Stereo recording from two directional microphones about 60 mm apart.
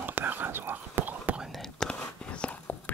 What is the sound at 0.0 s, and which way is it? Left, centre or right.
Whispering, right.